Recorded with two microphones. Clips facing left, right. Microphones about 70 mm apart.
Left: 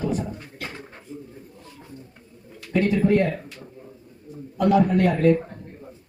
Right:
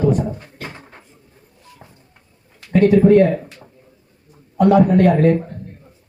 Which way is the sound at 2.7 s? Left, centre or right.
Right.